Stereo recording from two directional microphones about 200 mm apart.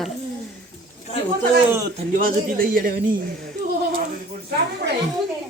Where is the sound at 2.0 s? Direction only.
45° right (ahead or behind).